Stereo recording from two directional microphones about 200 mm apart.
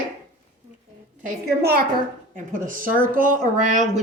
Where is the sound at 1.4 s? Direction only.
50° right (ahead or behind).